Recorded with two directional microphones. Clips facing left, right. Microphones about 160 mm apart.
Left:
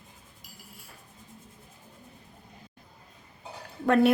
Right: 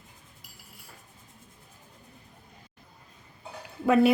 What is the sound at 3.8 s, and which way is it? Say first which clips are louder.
Speech: right 1 dB; 5° right (ahead or behind).